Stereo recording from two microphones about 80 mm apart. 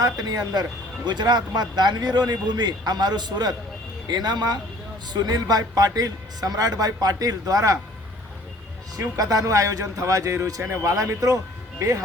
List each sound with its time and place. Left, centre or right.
0.0 s a man's voice: right
9.0 s a man's voice: right